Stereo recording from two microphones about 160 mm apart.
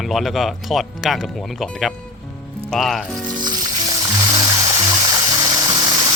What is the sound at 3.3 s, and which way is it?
Music, 25° right (ahead or behind).